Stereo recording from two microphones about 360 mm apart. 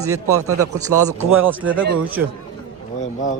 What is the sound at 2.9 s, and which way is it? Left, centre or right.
Speech, centre.